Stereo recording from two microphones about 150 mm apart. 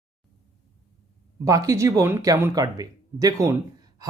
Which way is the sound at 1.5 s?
20° right (ahead or behind).